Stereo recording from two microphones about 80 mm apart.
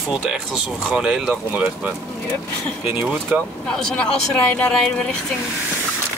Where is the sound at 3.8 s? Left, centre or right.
Centre.